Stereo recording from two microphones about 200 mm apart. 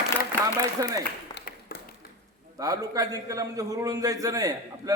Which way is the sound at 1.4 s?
60° left (ahead or behind).